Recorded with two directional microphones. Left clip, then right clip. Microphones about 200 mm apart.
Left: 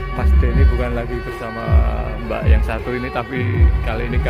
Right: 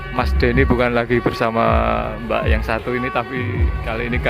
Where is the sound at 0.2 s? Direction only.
30° right (ahead or behind).